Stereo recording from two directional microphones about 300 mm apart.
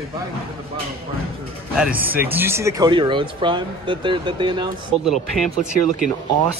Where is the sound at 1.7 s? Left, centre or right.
Centre.